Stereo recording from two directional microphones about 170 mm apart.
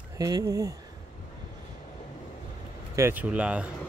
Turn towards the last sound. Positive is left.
turn(degrees=-5)  # may be behind; listen again after turning